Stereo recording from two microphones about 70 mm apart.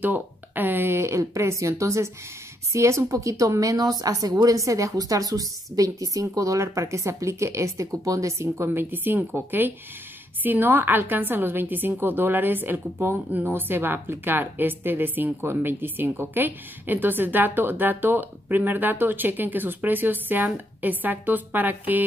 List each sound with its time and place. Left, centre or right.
0.0 s a woman's voice: right
8.6 s a woman's voice: right